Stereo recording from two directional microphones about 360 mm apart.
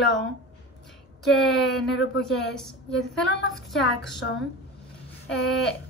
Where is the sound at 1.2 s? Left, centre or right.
Centre.